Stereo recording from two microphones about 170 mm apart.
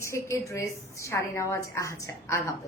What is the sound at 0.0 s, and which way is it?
A woman's voice, 15° left (ahead or behind).